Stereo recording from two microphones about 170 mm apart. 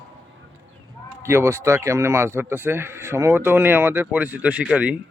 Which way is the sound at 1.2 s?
15° right (ahead or behind).